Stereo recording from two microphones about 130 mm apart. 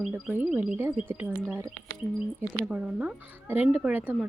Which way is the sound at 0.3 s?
15° right (ahead or behind).